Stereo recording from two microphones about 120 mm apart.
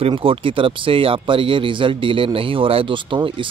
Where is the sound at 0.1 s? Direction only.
45° right (ahead or behind).